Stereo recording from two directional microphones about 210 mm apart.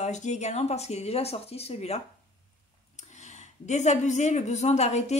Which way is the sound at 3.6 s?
35° left (ahead or behind).